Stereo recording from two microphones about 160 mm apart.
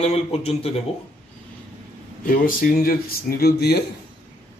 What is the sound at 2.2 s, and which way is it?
Speech, 60° left (ahead or behind).